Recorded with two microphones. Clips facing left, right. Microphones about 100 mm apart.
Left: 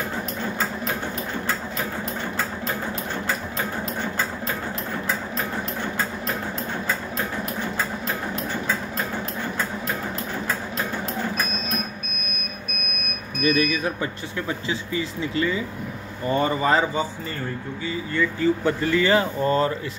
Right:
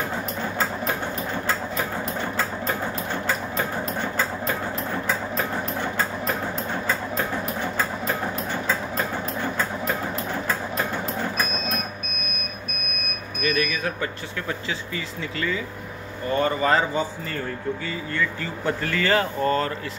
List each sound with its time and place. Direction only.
13.4 s speech: 25° left (ahead or behind)